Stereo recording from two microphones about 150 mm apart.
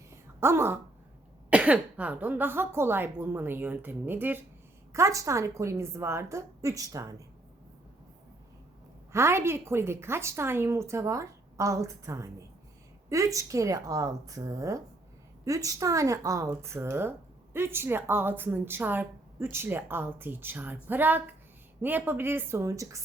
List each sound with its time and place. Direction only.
0.1 s a sound: 15° right (ahead or behind)
1.5 s a woman's voice: 10° right (ahead or behind)
9.1 s a woman's voice: 15° right (ahead or behind)